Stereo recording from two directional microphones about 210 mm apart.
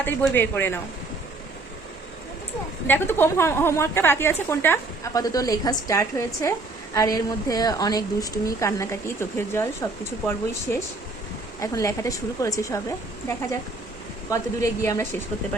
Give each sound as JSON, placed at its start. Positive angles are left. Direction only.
{"t": 0.0, "sound": "a woman's voice", "side_deg": 10}
{"t": 2.8, "sound": "a woman's voice", "side_deg": 10}
{"t": 14.3, "sound": "a woman's voice", "side_deg": 15}